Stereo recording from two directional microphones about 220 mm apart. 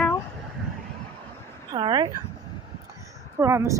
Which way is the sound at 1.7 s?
20° right (ahead or behind).